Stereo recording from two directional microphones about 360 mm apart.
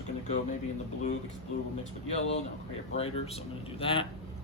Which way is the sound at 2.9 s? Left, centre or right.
Centre.